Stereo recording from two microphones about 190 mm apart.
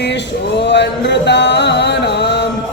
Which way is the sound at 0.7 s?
65° left (ahead or behind).